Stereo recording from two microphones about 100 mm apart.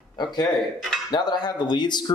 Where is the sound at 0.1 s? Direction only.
45° left (ahead or behind).